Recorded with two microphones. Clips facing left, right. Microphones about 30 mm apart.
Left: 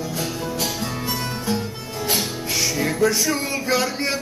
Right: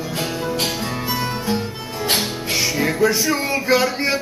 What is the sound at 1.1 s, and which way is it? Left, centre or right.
Music, centre.